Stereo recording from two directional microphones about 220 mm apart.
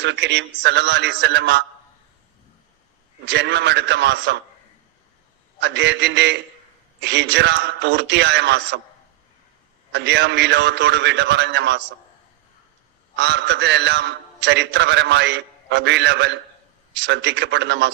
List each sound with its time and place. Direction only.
0.0 s a man's voice: 55° right (ahead or behind)
3.2 s a man's voice: 50° right (ahead or behind)
5.5 s a man's voice: 50° right (ahead or behind)
9.9 s a man's voice: 50° right (ahead or behind)
13.1 s a man's voice: 50° right (ahead or behind)